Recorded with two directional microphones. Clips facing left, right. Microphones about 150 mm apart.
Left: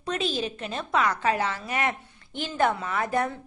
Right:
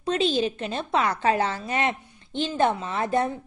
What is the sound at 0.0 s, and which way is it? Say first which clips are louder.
A woman's voice: right 5 dB; 30° right (ahead or behind).